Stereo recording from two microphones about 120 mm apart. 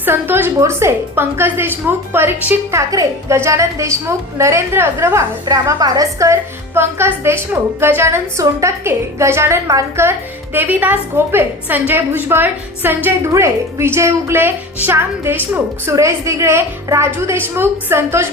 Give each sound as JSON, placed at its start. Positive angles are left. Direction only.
{"t": 0.0, "sound": "a woman's voice", "side_deg": -15}